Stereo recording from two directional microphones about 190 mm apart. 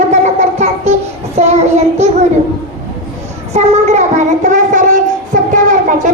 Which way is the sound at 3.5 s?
35° right (ahead or behind).